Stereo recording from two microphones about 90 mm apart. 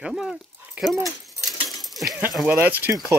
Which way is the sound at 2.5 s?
20° right (ahead or behind).